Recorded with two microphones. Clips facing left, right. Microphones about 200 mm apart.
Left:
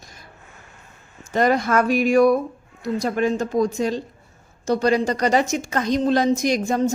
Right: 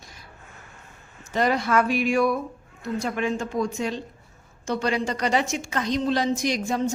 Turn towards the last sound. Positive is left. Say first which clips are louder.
# left 5 dB
turn(degrees=45)  # may be behind; listen again after turning